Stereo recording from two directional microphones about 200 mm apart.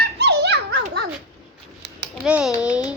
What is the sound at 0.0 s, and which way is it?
Dog, 55° right (ahead or behind).